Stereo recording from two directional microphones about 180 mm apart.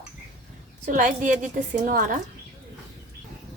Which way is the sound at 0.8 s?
45° right (ahead or behind).